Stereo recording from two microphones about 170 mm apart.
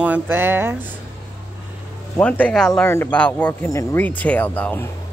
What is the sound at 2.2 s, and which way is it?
Speech, 5° left (ahead or behind).